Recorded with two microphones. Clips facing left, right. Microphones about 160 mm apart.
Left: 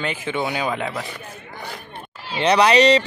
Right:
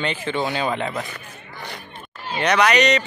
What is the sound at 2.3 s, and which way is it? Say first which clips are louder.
Speech: left 2 dB; 30° left (ahead or behind).